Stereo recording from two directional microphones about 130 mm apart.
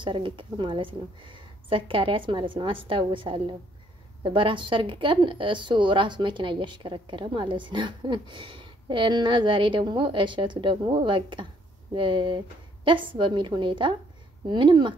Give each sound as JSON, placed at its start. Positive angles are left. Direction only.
{"t": 0.0, "sound": "speech", "side_deg": -40}